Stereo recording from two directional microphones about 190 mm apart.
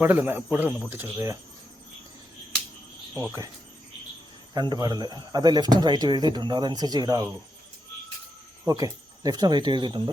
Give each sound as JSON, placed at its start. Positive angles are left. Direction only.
{"t": 0.0, "sound": "speech", "side_deg": -10}
{"t": 4.5, "sound": "a man's voice", "side_deg": -20}
{"t": 8.6, "sound": "speech", "side_deg": -20}